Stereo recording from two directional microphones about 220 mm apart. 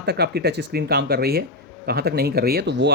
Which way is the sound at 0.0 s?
45° right (ahead or behind).